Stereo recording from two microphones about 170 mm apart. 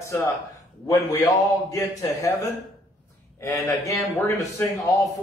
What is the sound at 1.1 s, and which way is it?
Speech, 20° left (ahead or behind).